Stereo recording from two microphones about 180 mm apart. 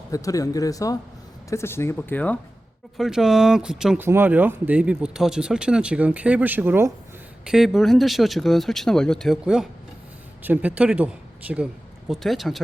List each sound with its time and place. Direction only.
0.1 s speech: 20° left (ahead or behind)
3.0 s speech: centre (ahead or behind)